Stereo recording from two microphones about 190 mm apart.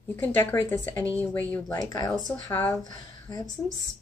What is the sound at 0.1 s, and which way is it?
Speech, 10° left (ahead or behind).